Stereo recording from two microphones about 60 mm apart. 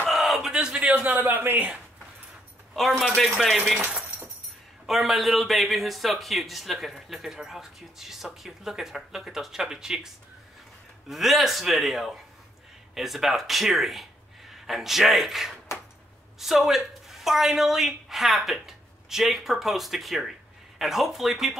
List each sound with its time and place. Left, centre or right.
0.1 s a sound: centre; by 1.7 s right
3.2 s a man's voice: centre
3.7 s speech: centre
4.8 s a man's voice: centre
11.1 s a man's voice: centre